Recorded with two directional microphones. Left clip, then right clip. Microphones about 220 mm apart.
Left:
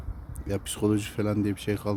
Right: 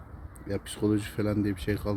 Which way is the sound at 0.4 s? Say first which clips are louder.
Left 2 dB; 15° left (ahead or behind).